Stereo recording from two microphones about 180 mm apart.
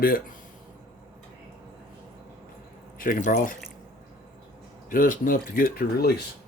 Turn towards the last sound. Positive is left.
turn(degrees=55)  # may be behind; listen again after turning